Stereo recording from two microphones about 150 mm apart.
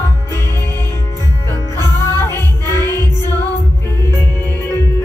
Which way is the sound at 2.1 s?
15° left (ahead or behind).